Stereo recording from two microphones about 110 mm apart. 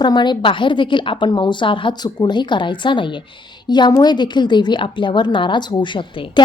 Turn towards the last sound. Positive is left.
turn(degrees=50)  # may be behind; listen again after turning